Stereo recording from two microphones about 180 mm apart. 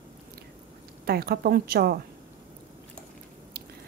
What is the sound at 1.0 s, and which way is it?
Speech, 60° right (ahead or behind).